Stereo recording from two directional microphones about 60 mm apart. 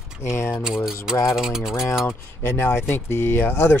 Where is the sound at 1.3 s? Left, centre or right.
Centre.